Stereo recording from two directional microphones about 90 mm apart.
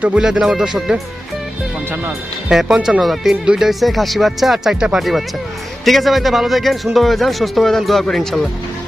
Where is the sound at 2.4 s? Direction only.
5° right (ahead or behind).